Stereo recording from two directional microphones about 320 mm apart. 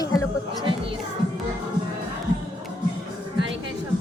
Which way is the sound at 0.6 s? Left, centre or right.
Centre.